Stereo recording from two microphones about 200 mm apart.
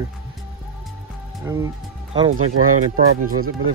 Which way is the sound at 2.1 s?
30° right (ahead or behind).